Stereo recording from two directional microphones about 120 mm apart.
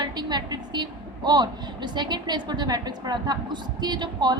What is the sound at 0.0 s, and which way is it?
A woman's voice, 35° right (ahead or behind).